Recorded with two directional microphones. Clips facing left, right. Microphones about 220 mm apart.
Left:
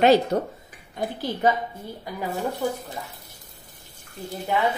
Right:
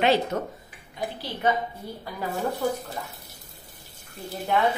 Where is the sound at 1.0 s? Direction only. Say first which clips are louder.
Left 3 dB; 50° left (ahead or behind).